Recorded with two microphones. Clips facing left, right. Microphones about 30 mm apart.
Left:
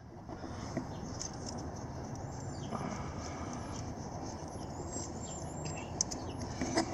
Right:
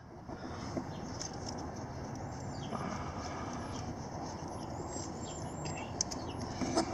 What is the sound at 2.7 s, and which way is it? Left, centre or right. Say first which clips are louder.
Horse: even; centre.